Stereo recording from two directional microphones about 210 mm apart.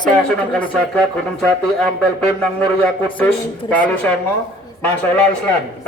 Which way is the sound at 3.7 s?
5° left (ahead or behind).